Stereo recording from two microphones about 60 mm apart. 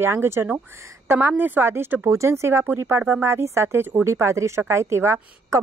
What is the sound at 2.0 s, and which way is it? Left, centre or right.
Speech, right.